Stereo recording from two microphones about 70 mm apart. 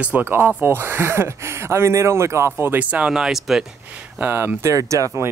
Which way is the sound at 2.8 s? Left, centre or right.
Right.